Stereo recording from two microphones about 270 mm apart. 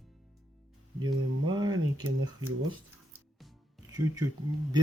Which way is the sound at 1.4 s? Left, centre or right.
Centre.